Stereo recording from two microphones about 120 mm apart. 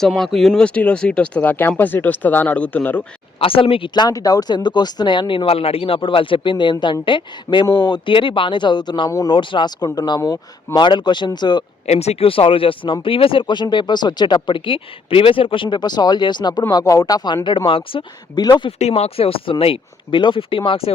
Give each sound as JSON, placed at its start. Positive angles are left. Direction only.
{"t": 0.1, "sound": "speech", "side_deg": 0}
{"t": 3.3, "sound": "speech", "side_deg": 50}
{"t": 5.5, "sound": "speech", "side_deg": 55}
{"t": 10.2, "sound": "speech", "side_deg": 25}
{"t": 10.8, "sound": "speech", "side_deg": 40}
{"t": 11.9, "sound": "speech", "side_deg": 60}
{"t": 18.8, "sound": "speech", "side_deg": 60}